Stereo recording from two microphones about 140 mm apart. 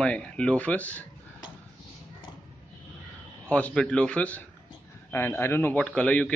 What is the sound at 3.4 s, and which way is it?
A man's voice, 10° left (ahead or behind).